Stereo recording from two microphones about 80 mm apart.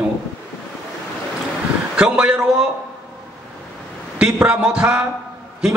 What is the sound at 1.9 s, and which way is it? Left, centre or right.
Speech, centre.